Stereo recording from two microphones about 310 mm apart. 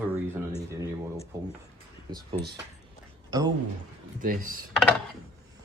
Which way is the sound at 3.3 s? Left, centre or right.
Centre.